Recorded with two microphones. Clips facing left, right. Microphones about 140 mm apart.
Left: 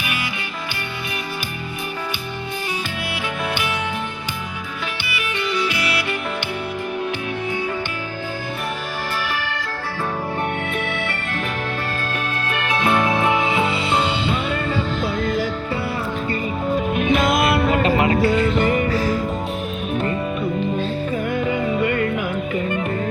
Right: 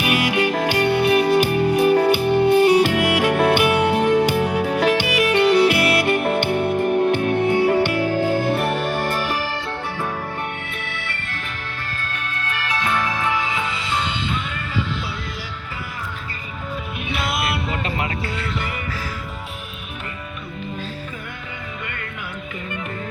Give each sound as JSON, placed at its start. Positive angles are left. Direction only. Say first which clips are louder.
{"t": 0.0, "sound": "music", "louder": "right 9 dB", "side_deg": -75}
{"t": 12.5, "sound": "music", "louder": "left 4 dB", "side_deg": 25}
{"t": 17.2, "sound": "music", "louder": "left 7 dB", "side_deg": -5}
{"t": 17.5, "sound": "music", "louder": "left 8 dB", "side_deg": 65}
{"t": 18.0, "sound": "music", "louder": "left 10 dB", "side_deg": 25}
{"t": 18.5, "sound": "music", "louder": "left 10 dB", "side_deg": 45}